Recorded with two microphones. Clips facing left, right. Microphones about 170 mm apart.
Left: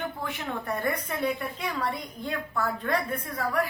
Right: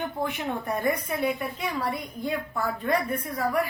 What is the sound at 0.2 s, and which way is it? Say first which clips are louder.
A woman's voice: right 4 dB; 20° right (ahead or behind).